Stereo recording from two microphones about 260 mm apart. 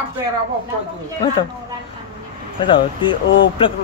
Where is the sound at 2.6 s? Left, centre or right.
Centre.